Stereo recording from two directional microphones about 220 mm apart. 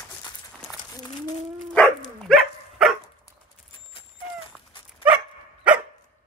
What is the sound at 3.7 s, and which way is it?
Dog, 25° left (ahead or behind).